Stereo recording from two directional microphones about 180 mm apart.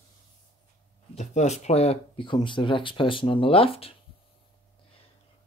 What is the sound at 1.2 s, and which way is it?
Speech, 40° left (ahead or behind).